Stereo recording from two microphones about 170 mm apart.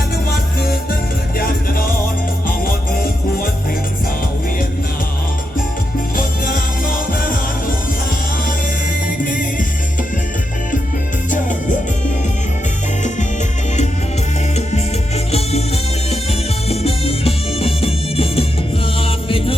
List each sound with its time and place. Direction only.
0.3 s music: 65° left (ahead or behind)
6.1 s music: 55° left (ahead or behind)
9.0 s music: 55° left (ahead or behind)
13.0 s music: 45° left (ahead or behind)
15.3 s music: 35° left (ahead or behind)
16.6 s music: 35° left (ahead or behind)